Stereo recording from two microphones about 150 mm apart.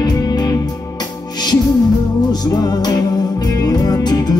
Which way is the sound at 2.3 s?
25° left (ahead or behind).